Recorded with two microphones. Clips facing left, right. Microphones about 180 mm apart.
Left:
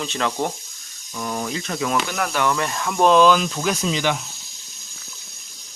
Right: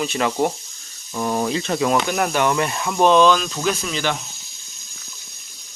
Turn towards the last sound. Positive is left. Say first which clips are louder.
# left 1 dB
turn(degrees=15)  # may be behind; listen again after turning